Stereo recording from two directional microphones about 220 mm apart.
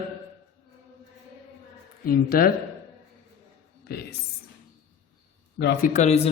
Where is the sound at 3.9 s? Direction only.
45° left (ahead or behind).